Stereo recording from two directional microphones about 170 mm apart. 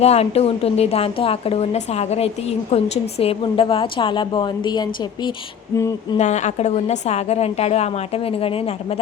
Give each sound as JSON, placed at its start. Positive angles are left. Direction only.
{"t": 0.0, "sound": "a woman's voice", "side_deg": 40}
{"t": 6.1, "sound": "a woman's voice", "side_deg": 40}